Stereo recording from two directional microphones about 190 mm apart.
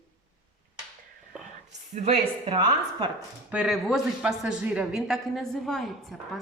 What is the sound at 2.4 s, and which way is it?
Speech, 25° right (ahead or behind).